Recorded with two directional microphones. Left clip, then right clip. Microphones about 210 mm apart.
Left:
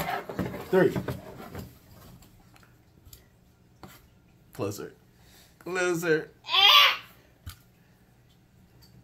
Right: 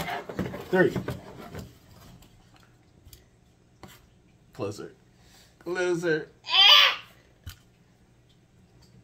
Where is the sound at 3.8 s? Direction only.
15° right (ahead or behind).